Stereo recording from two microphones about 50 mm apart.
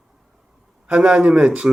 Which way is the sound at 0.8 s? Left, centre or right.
Right.